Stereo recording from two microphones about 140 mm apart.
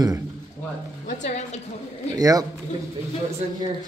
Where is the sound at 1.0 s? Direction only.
55° left (ahead or behind).